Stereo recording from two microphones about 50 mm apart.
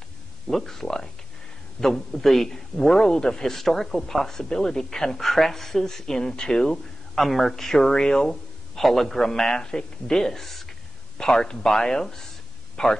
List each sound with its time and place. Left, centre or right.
0.5 s a man's voice: centre
7.2 s a man's voice: centre